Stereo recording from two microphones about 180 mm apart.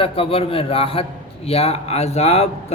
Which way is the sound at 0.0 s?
30° left (ahead or behind).